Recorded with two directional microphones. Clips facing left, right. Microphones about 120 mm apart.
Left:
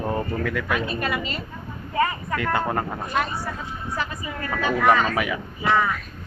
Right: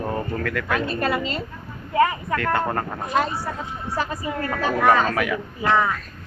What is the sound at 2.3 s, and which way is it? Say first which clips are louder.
Speech: right 1 dB; 15° left (ahead or behind).